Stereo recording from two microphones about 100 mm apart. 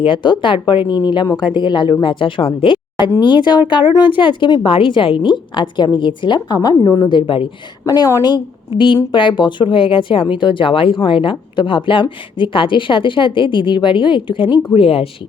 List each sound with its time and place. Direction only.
0.0 s a woman's voice: 55° left (ahead or behind); by 7.1 s 35° left (ahead or behind)
7.1 s a woman's voice: 55° left (ahead or behind)
7.9 s a woman's voice: 35° left (ahead or behind)
9.1 s a woman's voice: 55° left (ahead or behind)
14.7 s speech: 70° left (ahead or behind)